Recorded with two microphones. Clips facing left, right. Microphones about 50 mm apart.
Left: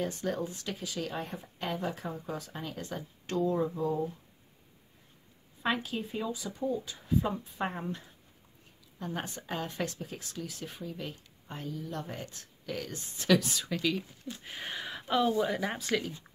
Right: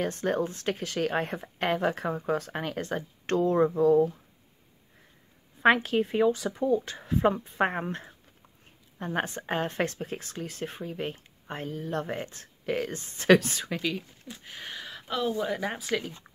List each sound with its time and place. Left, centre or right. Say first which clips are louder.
0.0 s speech: right 5 dB; right
5.6 s speech: right 10 dB; right
9.0 s speech: right 7 dB; right
13.7 s speech: even; centre
13.9 s speech: left 1 dB; centre